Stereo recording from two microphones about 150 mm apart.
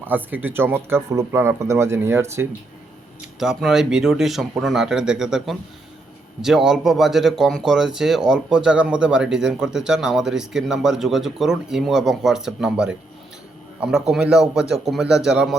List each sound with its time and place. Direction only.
0.0 s speech: 10° right (ahead or behind)
3.3 s a man's voice: 5° right (ahead or behind)